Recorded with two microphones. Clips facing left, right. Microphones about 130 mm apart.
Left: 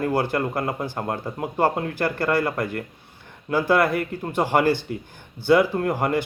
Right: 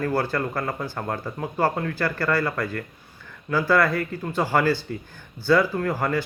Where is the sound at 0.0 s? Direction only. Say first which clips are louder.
Left 2 dB; 20° left (ahead or behind).